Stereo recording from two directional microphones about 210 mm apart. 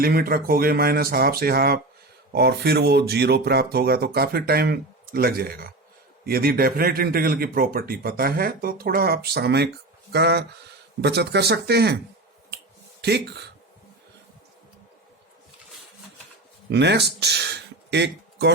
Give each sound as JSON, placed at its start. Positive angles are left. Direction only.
{"t": 0.0, "sound": "a man's voice", "side_deg": -45}
{"t": 13.0, "sound": "speech", "side_deg": -50}
{"t": 16.7, "sound": "a man's voice", "side_deg": -55}